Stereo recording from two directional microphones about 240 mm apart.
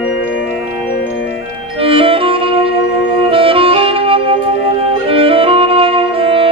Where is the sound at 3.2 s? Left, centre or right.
Right.